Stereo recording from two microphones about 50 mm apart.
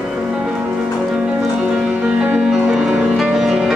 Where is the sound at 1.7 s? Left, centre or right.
Centre.